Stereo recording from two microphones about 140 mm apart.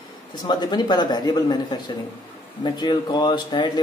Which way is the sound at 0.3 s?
30° left (ahead or behind).